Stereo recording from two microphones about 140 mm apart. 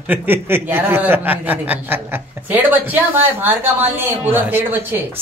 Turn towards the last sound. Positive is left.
turn(degrees=-15)  # may be behind; listen again after turning